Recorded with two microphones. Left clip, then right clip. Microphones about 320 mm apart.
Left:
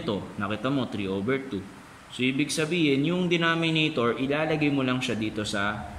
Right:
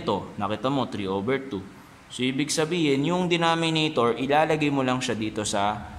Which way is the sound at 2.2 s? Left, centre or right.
Centre.